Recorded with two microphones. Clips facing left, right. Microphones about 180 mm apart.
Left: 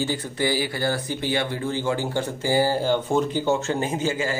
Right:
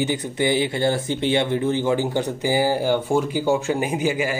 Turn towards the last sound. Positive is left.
turn(degrees=-15)  # may be behind; listen again after turning